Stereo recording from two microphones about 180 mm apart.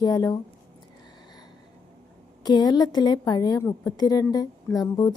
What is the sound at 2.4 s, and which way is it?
A woman's voice, 20° left (ahead or behind).